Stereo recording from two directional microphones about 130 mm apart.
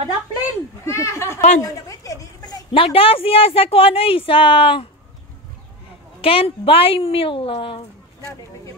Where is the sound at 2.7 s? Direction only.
45° left (ahead or behind).